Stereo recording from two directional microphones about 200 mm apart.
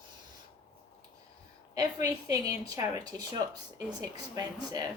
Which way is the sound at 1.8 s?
15° right (ahead or behind).